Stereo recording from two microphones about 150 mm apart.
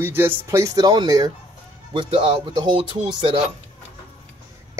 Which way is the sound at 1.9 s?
35° right (ahead or behind).